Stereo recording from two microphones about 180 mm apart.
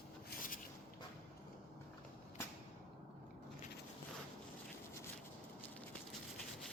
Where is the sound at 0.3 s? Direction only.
50° left (ahead or behind).